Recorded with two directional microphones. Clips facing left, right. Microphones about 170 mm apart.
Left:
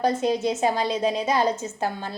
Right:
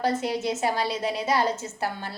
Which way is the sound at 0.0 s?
20° left (ahead or behind).